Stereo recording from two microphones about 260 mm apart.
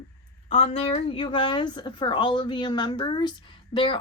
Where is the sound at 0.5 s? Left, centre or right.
Left.